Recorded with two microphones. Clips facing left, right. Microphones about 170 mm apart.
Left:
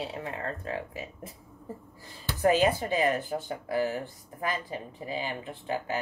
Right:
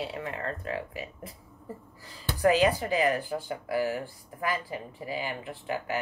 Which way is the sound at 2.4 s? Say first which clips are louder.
Right 1 dB; 25° left (ahead or behind).